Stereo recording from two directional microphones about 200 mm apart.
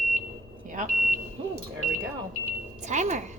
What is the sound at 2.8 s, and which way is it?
Speech, 35° right (ahead or behind).